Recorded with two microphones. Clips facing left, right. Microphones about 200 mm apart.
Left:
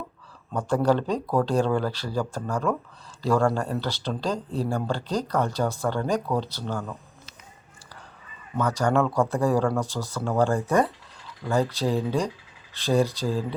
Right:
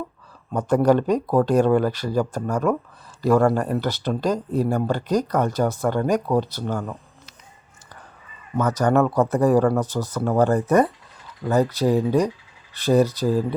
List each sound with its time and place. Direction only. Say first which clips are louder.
0.5 s speech: right 5 dB; 10° right (ahead or behind)
8.5 s speech: right 4 dB; 20° right (ahead or behind)